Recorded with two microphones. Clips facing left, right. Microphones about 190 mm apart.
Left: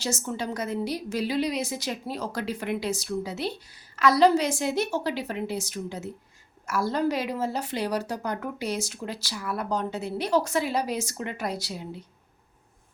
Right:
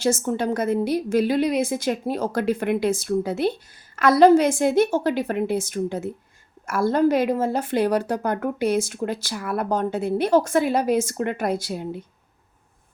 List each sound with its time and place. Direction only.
0.0 s a woman's voice: 55° right (ahead or behind)